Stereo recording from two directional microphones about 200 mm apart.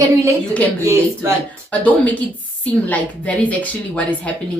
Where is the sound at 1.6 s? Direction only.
10° left (ahead or behind).